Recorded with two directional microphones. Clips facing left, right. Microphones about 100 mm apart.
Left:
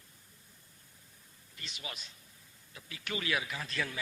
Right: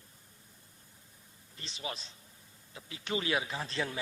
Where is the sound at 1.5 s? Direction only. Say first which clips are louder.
Right 5 dB; 30° right (ahead or behind).